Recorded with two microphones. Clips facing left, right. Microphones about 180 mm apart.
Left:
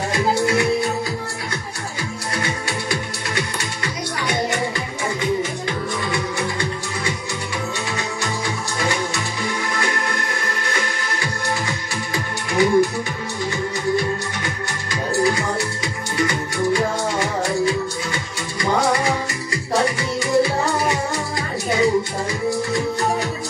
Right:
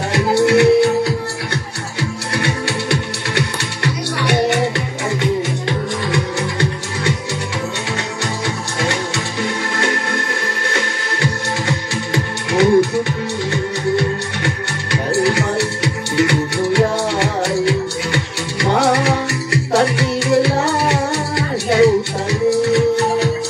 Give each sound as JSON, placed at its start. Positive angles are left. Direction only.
{"t": 0.1, "sound": "music", "side_deg": -70}
{"t": 11.6, "sound": "music", "side_deg": -70}